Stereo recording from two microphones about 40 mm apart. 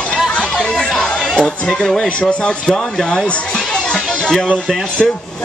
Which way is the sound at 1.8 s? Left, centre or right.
Left.